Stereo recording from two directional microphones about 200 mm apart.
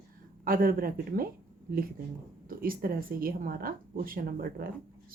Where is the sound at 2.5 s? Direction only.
45° right (ahead or behind).